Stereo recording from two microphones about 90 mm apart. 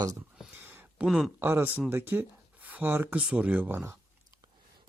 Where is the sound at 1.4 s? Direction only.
25° right (ahead or behind).